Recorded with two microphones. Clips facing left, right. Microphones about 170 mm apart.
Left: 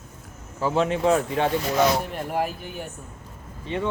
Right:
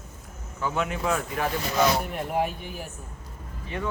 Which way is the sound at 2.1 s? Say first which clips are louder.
Even; centre (ahead or behind).